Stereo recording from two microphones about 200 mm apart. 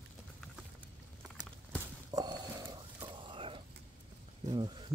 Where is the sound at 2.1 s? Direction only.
20° right (ahead or behind).